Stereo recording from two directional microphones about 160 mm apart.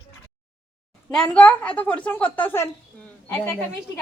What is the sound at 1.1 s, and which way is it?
Speech, 5° left (ahead or behind).